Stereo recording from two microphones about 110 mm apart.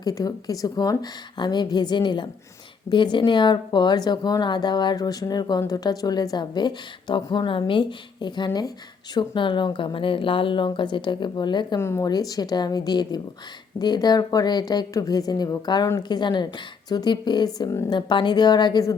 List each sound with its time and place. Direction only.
0.0 s a woman's voice: 35° left (ahead or behind)
11.8 s speech: 25° left (ahead or behind)
12.0 s a woman's voice: 35° left (ahead or behind)